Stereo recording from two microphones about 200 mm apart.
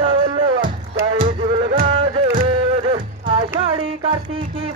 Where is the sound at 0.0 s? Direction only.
25° right (ahead or behind).